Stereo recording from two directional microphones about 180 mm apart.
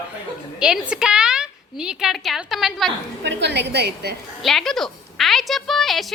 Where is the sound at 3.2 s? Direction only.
70° right (ahead or behind).